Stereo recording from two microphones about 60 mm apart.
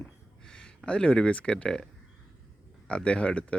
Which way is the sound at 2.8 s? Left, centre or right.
Centre.